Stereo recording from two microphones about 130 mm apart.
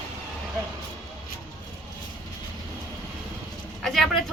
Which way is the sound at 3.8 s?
Centre (ahead or behind).